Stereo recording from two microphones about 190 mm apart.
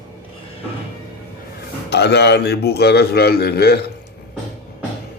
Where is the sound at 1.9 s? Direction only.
60° left (ahead or behind).